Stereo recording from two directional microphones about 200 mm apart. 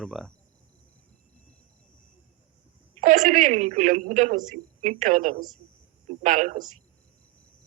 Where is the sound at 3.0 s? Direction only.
40° right (ahead or behind).